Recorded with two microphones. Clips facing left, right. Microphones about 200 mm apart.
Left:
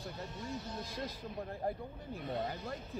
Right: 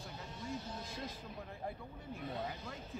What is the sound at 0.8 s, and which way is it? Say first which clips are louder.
Speech: left 4 dB; 40° left (ahead or behind).